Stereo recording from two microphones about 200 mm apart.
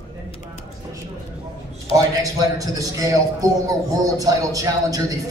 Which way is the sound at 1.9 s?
15° right (ahead or behind).